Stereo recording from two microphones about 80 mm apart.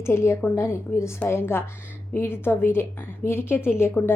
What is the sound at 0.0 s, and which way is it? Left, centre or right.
A woman's voice, left.